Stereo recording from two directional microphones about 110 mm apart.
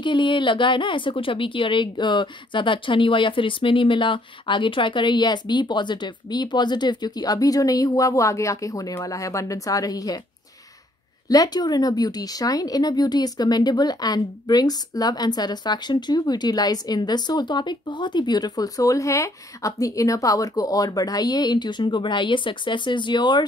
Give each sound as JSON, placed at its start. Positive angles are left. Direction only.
{"t": 0.0, "sound": "speech", "side_deg": 45}
{"t": 11.2, "sound": "a woman's voice", "side_deg": 35}